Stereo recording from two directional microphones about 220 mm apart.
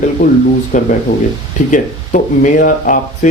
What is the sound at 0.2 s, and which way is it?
Speech, 40° left (ahead or behind).